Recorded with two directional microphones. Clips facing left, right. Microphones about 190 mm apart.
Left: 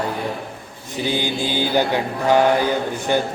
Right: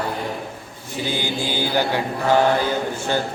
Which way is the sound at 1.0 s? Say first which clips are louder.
Left 3 dB; 15° left (ahead or behind).